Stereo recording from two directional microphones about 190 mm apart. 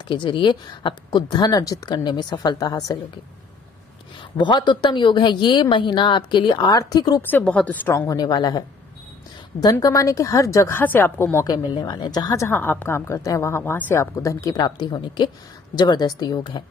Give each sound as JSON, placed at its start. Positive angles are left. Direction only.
{"t": 0.1, "sound": "a woman's voice", "side_deg": 25}
{"t": 4.4, "sound": "a woman's voice", "side_deg": 25}
{"t": 7.2, "sound": "a woman's voice", "side_deg": 10}